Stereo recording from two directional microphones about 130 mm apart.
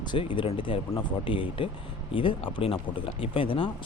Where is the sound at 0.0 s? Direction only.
40° left (ahead or behind).